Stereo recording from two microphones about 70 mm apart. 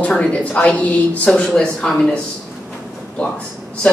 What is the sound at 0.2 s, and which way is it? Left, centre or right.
A woman's voice, centre.